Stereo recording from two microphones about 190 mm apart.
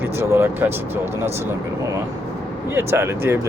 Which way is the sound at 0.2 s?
15° right (ahead or behind).